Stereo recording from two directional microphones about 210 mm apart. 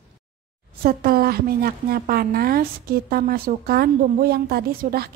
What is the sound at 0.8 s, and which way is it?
Speech, 45° right (ahead or behind).